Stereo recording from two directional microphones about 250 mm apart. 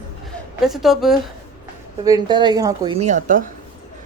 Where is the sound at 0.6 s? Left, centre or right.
Centre.